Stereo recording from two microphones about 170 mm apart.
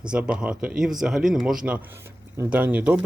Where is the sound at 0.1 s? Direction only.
5° right (ahead or behind).